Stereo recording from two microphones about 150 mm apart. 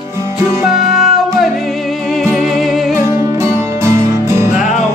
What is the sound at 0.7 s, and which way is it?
Music, centre (ahead or behind).